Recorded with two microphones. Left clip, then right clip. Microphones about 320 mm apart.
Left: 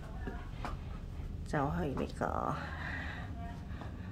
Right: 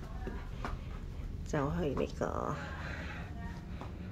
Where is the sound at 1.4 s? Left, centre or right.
Centre.